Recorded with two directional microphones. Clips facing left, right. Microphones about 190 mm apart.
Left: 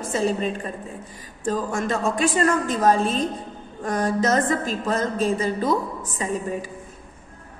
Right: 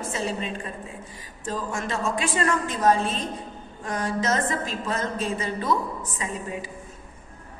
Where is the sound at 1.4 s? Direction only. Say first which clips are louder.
Left 6 dB; 35° left (ahead or behind).